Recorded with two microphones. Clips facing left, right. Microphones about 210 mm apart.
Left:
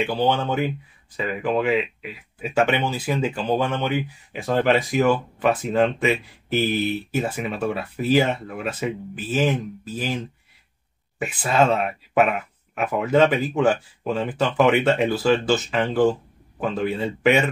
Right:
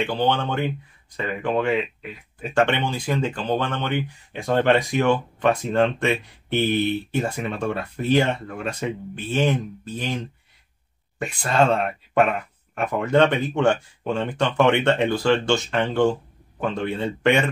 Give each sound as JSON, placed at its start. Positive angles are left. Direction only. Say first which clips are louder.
{"t": 0.0, "sound": "speech", "louder": "left 1 dB", "side_deg": 5}